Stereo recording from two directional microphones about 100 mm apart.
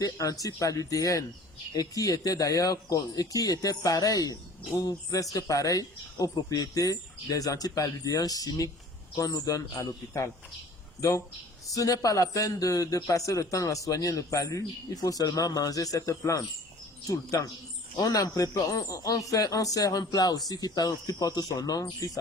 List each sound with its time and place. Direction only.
0.0 s speech: 35° left (ahead or behind)
11.7 s speech: 35° left (ahead or behind)